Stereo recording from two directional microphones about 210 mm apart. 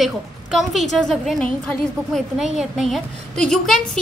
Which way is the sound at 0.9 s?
Centre (ahead or behind).